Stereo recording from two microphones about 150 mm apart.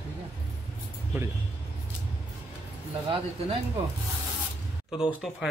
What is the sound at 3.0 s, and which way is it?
Speech, 40° right (ahead or behind).